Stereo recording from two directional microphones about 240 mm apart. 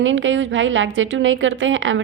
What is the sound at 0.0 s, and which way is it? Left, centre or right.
A woman's voice, right.